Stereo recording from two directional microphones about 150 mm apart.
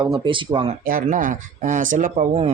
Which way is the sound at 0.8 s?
65° right (ahead or behind).